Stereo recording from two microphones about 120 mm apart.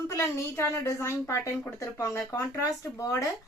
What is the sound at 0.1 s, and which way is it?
Speech, 25° left (ahead or behind).